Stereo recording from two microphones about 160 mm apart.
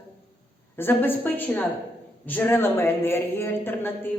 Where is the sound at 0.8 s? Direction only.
15° left (ahead or behind).